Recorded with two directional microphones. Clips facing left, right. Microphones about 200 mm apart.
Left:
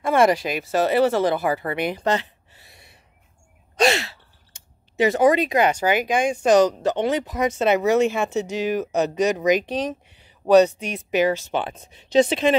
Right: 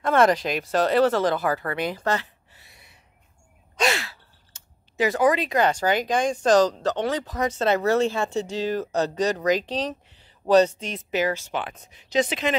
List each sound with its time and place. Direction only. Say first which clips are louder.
0.0 s speech: left 1 dB; 10° left (ahead or behind)
3.8 s speech: left 5 dB; 25° left (ahead or behind)